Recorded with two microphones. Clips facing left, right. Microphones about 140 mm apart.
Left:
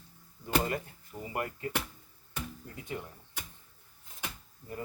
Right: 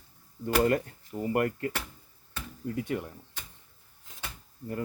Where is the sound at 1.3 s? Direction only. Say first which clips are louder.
Right 7 dB; 60° right (ahead or behind).